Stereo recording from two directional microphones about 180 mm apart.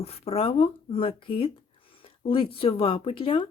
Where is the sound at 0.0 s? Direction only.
35° left (ahead or behind).